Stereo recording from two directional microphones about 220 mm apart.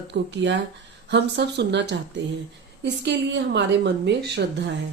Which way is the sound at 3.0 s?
50° right (ahead or behind).